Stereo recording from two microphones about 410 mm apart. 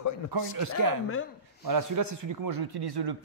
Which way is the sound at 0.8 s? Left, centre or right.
Right.